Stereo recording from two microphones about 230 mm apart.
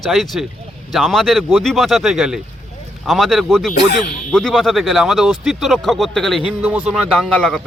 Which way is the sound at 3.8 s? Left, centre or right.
Left.